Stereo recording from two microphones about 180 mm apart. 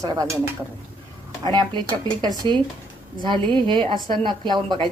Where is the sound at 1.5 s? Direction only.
25° right (ahead or behind).